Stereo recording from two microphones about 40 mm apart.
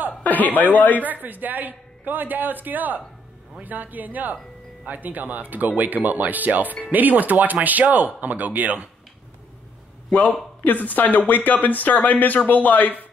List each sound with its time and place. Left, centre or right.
0.2 s a sound: left
0.7 s speech: left
1.2 s speech: right
10.6 s speech: left